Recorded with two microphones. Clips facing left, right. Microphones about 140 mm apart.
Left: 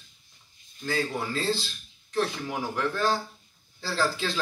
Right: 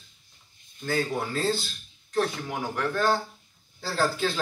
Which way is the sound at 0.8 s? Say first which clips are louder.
Right 1 dB; 55° right (ahead or behind).